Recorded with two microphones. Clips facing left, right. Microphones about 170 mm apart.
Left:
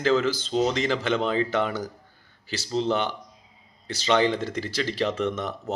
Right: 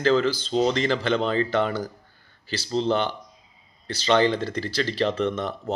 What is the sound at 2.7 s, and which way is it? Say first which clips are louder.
Speech: right 2 dB; 10° left (ahead or behind).